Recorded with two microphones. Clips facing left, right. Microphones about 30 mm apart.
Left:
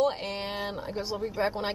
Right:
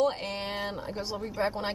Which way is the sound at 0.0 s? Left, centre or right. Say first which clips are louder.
Left 1 dB; centre.